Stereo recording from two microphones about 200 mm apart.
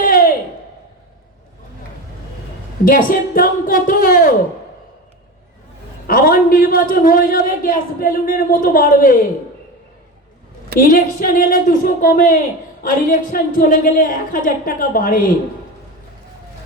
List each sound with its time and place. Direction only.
0.0 s a sound: 45° left (ahead or behind)
2.8 s a man's voice: 45° left (ahead or behind)
6.1 s a man's voice: 45° left (ahead or behind)
10.8 s a man's voice: 45° left (ahead or behind)